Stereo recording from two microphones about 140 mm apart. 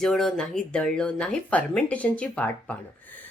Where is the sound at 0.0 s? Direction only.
Centre (ahead or behind).